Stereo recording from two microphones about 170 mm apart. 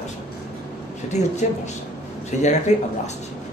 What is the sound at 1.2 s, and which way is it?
Speech, 40° left (ahead or behind).